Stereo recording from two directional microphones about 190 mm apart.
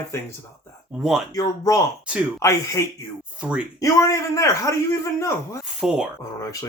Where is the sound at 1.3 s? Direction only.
20° left (ahead or behind).